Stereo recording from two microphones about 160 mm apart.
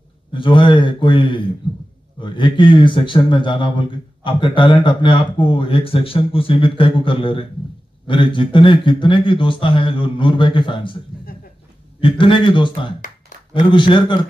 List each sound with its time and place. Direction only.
0.3 s speech: 30° left (ahead or behind)
1.6 s a sound: 30° left (ahead or behind)
2.1 s speech: 30° left (ahead or behind)
12.0 s speech: 30° left (ahead or behind)